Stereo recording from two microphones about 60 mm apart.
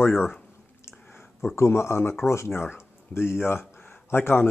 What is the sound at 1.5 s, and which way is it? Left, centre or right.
Speech, left.